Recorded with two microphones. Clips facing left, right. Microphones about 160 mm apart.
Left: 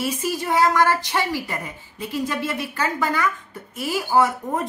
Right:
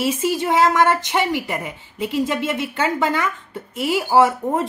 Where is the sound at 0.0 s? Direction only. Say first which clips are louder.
Right 5 dB; 25° right (ahead or behind).